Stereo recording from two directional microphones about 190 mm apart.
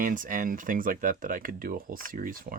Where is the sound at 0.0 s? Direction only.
45° right (ahead or behind).